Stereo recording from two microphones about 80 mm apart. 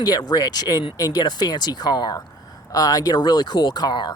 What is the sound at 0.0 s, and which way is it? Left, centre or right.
Speech, left.